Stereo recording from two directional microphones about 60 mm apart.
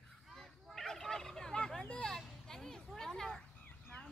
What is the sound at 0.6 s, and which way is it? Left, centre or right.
Turkey, centre.